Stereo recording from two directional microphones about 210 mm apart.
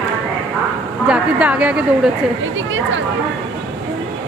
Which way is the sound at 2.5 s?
65° right (ahead or behind).